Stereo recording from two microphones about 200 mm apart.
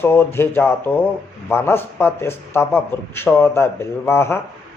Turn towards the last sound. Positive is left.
turn(degrees=10)  # may be behind; listen again after turning